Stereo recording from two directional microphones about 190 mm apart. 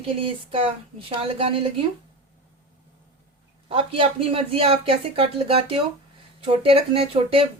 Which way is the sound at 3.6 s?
30° right (ahead or behind).